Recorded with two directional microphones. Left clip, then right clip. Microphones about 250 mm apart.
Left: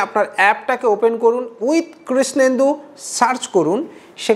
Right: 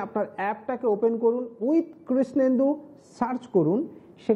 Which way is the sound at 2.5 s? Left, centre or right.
Centre.